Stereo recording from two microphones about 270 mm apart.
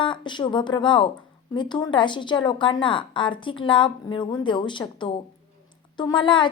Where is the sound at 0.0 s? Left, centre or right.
Centre.